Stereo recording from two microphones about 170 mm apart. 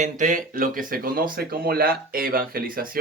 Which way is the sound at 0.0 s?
50° right (ahead or behind).